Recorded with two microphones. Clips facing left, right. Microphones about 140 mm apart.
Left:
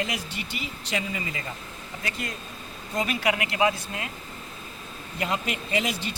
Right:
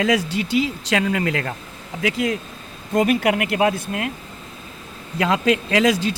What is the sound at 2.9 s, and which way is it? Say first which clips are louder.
Speech: right 8 dB; 50° right (ahead or behind).